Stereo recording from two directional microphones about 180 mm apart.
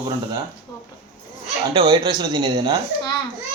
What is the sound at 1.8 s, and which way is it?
Speech, 25° right (ahead or behind).